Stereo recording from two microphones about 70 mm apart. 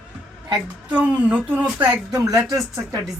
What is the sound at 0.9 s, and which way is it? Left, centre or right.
A woman's voice, right.